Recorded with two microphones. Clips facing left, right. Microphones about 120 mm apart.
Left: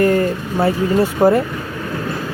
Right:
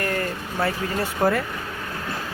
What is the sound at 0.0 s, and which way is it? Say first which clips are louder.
Speech: left 11 dB; 25° left (ahead or behind).